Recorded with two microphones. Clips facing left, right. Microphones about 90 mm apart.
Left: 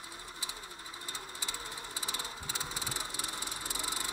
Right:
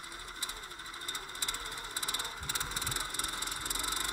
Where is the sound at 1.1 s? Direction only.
55° right (ahead or behind).